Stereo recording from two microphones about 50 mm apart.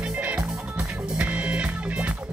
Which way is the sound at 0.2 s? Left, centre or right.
Right.